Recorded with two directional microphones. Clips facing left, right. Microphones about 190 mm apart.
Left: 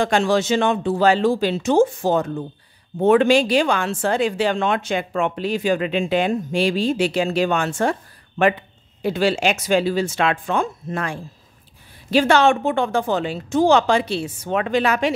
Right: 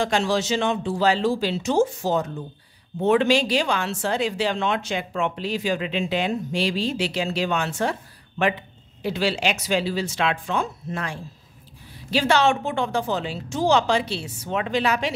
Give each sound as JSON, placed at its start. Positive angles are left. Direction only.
{"t": 0.0, "sound": "speech", "side_deg": 55}
{"t": 9.0, "sound": "speech", "side_deg": 50}